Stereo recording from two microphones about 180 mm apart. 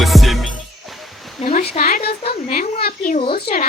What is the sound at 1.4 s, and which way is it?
A woman's voice, 45° left (ahead or behind).